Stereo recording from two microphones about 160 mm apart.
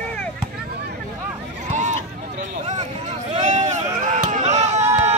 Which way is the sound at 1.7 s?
50° right (ahead or behind).